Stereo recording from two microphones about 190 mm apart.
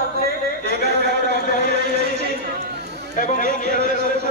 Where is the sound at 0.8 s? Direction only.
60° right (ahead or behind).